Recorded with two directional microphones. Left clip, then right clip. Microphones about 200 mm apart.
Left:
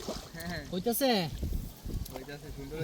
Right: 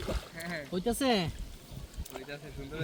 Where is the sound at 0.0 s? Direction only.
30° right (ahead or behind).